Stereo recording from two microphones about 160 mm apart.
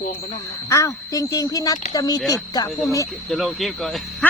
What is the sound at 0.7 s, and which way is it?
Speech, 20° left (ahead or behind).